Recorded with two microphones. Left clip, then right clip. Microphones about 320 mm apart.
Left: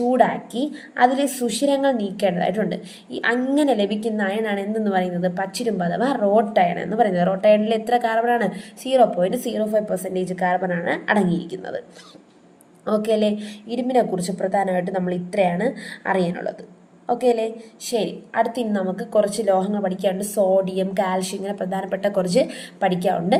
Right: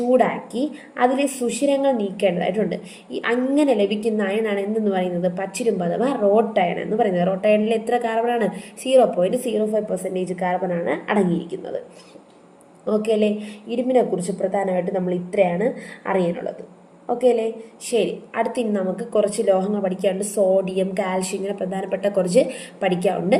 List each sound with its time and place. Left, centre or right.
0.1 s a woman's voice: left
13.0 s a woman's voice: left